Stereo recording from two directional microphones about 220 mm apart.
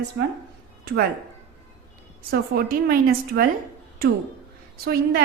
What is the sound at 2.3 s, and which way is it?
A woman's voice, 45° right (ahead or behind).